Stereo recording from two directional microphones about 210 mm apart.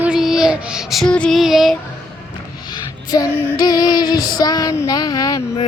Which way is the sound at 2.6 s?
20° left (ahead or behind).